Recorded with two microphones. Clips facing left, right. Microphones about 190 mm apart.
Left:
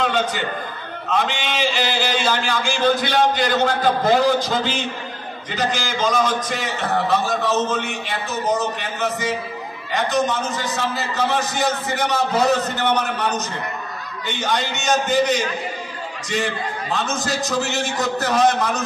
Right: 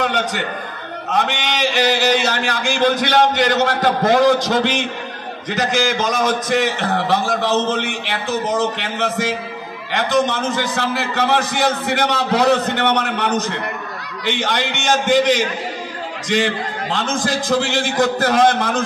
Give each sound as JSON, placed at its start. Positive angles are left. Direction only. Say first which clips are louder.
{"t": 0.1, "sound": "a man's voice", "louder": "even", "side_deg": -70}
{"t": 1.0, "sound": "a man's voice", "louder": "right 2 dB", "side_deg": -55}
{"t": 5.8, "sound": "a man's voice", "louder": "right 3 dB", "side_deg": -45}
{"t": 6.5, "sound": "a man's voice", "louder": "right 5 dB", "side_deg": -75}